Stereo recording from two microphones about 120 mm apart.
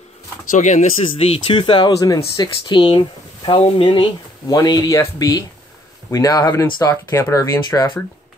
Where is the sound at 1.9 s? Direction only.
30° left (ahead or behind).